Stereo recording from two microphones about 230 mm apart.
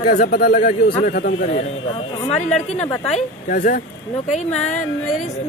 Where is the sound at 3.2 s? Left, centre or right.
Left.